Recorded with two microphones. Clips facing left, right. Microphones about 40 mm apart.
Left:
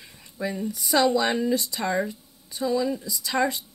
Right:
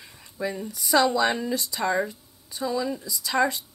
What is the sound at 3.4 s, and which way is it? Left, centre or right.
Speech, centre.